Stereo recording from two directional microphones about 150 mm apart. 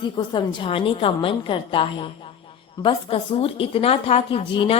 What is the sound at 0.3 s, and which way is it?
A woman's voice, 35° left (ahead or behind).